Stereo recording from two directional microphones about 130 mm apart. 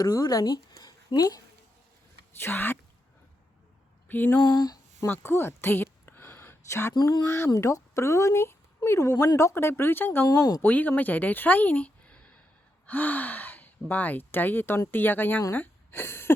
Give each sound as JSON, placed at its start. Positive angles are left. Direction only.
{"t": 0.0, "sound": "a woman's voice", "side_deg": 30}
{"t": 2.4, "sound": "speech", "side_deg": 15}
{"t": 4.1, "sound": "speech", "side_deg": 15}
{"t": 4.4, "sound": "a sound", "side_deg": 30}
{"t": 5.0, "sound": "a sound", "side_deg": 15}
{"t": 6.9, "sound": "speech", "side_deg": 30}
{"t": 10.2, "sound": "speech", "side_deg": 30}
{"t": 10.6, "sound": "speech", "side_deg": 15}